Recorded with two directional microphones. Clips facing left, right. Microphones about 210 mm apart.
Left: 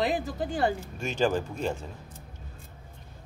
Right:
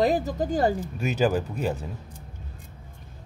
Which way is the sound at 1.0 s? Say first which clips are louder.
Right 2 dB; 5° right (ahead or behind).